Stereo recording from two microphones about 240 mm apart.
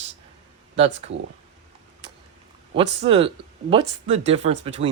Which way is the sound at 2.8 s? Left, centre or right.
Right.